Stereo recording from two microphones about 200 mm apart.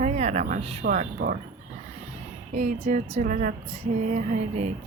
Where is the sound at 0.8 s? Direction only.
45° right (ahead or behind).